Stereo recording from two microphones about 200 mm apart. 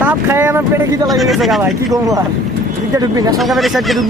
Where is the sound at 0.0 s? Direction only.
10° right (ahead or behind).